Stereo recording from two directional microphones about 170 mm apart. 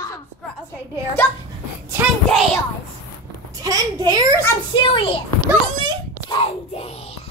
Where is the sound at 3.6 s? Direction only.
20° right (ahead or behind).